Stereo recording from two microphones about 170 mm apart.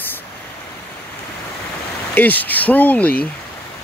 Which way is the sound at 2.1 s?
10° left (ahead or behind).